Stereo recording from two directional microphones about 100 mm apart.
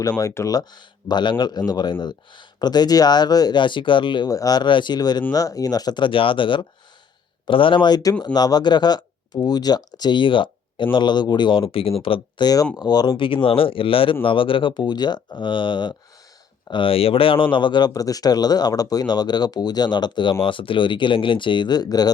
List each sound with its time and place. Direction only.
0.0 s speech: 35° left (ahead or behind); by 4.3 s 55° left (ahead or behind)
4.3 s speech: 35° left (ahead or behind); by 12.5 s 65° left (ahead or behind)
12.7 s speech: 40° left (ahead or behind)
20.4 s speech: 60° left (ahead or behind); by 22.1 s 40° left (ahead or behind)